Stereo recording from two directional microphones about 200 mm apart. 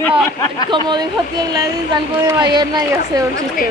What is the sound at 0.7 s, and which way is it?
Speech, 20° right (ahead or behind).